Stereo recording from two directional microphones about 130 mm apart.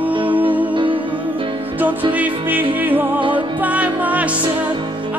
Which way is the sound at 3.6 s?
10° right (ahead or behind).